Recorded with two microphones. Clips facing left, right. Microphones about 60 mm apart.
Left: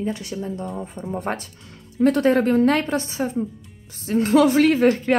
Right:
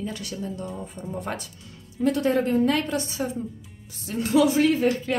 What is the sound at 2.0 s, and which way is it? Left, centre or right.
Speech, left.